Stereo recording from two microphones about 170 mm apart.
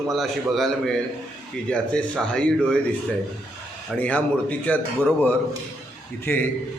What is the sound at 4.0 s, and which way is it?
A man's voice, 10° left (ahead or behind).